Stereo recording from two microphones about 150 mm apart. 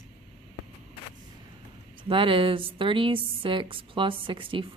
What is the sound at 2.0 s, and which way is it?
A woman's voice, 35° right (ahead or behind).